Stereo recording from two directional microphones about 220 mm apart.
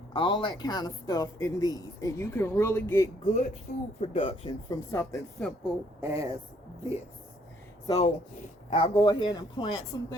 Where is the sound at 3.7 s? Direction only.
40° left (ahead or behind).